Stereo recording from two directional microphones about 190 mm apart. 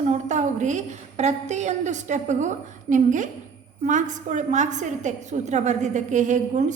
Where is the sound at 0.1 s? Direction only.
40° right (ahead or behind).